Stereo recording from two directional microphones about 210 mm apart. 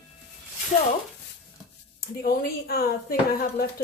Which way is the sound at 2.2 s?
45° left (ahead or behind).